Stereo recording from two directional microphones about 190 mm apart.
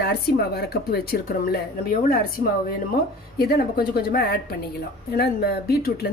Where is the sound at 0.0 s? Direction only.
55° left (ahead or behind).